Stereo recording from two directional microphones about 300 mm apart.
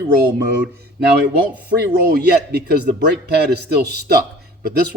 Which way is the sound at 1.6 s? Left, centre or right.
Right.